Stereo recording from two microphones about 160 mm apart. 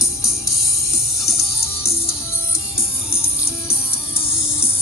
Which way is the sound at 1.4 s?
20° left (ahead or behind).